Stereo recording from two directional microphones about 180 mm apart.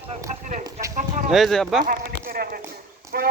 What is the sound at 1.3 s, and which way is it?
Speech, centre (ahead or behind).